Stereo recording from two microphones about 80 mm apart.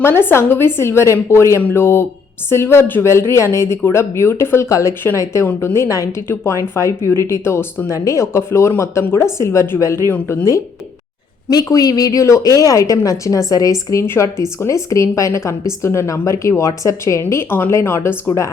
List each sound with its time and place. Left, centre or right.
0.0 s a woman's voice: left
7.9 s a woman's voice: left
11.4 s speech: left
14.0 s a woman's voice: left